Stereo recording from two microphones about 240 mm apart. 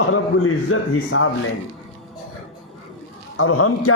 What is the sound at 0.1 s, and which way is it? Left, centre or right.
A man's voice, left.